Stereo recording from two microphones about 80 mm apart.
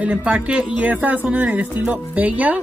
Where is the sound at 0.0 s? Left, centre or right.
Centre.